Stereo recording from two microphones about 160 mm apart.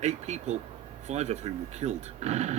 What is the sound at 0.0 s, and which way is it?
Speech, 45° right (ahead or behind).